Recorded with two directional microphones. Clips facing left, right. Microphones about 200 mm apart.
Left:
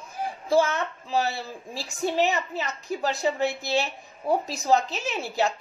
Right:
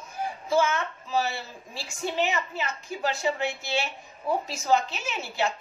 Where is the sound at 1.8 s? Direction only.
35° left (ahead or behind).